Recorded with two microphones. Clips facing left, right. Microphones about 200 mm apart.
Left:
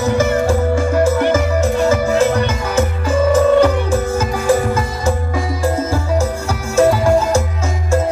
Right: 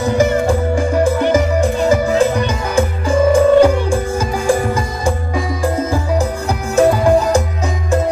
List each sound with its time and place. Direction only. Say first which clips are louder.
0.0 s music: right 1 dB; 15° right (ahead or behind)
6.7 s music: right 1 dB; 15° right (ahead or behind)